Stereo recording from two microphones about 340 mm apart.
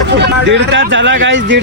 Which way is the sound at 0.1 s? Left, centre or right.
Right.